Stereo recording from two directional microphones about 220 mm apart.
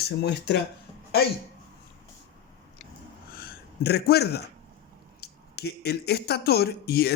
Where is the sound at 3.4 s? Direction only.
45° left (ahead or behind).